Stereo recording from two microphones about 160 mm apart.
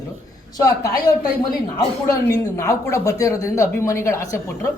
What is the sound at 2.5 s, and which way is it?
Speech, 20° left (ahead or behind).